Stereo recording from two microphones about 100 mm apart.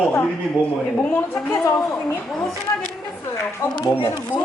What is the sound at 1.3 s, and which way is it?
Speech, 30° left (ahead or behind).